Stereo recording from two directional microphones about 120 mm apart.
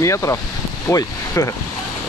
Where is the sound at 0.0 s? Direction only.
25° left (ahead or behind).